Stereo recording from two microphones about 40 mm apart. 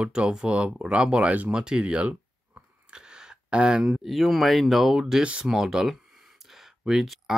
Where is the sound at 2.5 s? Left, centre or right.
Right.